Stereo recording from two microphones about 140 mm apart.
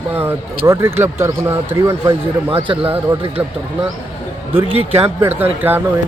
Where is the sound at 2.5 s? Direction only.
40° right (ahead or behind).